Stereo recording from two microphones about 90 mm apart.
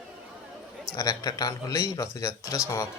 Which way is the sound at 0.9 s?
45° left (ahead or behind).